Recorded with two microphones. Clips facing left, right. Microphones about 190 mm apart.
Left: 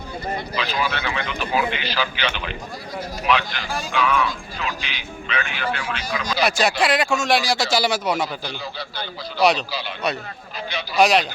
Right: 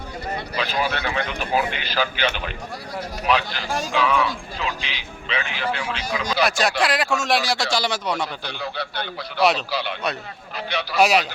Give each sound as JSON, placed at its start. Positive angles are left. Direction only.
{"t": 0.5, "sound": "a man's voice", "side_deg": -45}
{"t": 3.2, "sound": "a man's voice", "side_deg": -35}
{"t": 6.4, "sound": "speech", "side_deg": 0}
{"t": 8.4, "sound": "a man's voice", "side_deg": -65}
{"t": 9.4, "sound": "speech", "side_deg": 0}
{"t": 9.6, "sound": "a man's voice", "side_deg": -65}
{"t": 10.9, "sound": "a man's voice", "side_deg": -5}